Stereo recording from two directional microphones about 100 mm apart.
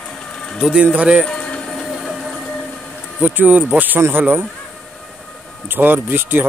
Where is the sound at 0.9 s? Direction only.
10° right (ahead or behind).